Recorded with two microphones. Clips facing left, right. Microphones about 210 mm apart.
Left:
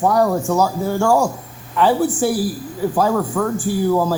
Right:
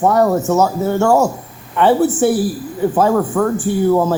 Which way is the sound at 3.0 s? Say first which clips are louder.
Right 4 dB; 40° right (ahead or behind).